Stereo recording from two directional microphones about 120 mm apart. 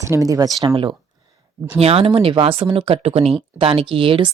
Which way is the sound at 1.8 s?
55° right (ahead or behind).